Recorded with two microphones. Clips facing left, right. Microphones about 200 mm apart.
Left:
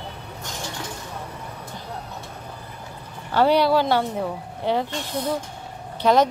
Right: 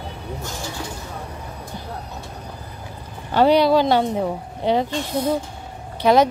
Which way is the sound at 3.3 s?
15° right (ahead or behind).